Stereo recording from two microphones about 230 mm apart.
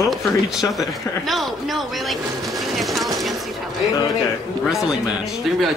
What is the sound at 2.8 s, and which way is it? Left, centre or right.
Vehicle, centre.